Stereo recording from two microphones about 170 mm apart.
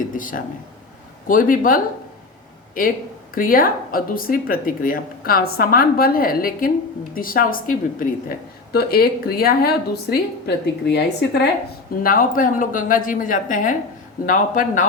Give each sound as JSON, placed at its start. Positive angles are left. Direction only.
{"t": 0.0, "sound": "speech", "side_deg": 50}
{"t": 8.7, "sound": "speech", "side_deg": 65}
{"t": 12.0, "sound": "speech", "side_deg": 55}